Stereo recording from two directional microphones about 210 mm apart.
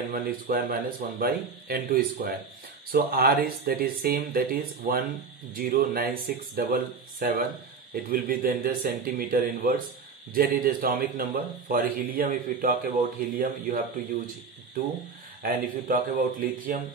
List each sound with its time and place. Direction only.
0.1 s a man's voice: 45° right (ahead or behind)
15.4 s a man's voice: 40° right (ahead or behind)